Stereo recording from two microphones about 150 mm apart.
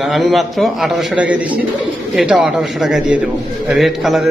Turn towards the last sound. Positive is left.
turn(degrees=0)  # may be behind; listen again after turning